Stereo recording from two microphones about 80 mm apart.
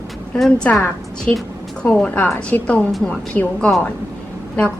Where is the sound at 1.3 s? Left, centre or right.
Centre.